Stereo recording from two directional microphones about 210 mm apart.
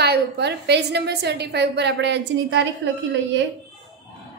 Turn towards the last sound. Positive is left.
turn(degrees=-60)  # may be behind; listen again after turning